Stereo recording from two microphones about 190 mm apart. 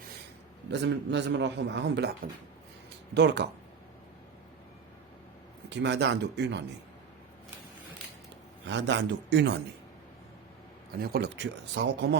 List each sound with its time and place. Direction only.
0.7 s a man's voice: 65° right (ahead or behind)
5.6 s a man's voice: 65° right (ahead or behind)
8.6 s a man's voice: 70° right (ahead or behind)
11.0 s a man's voice: 60° right (ahead or behind)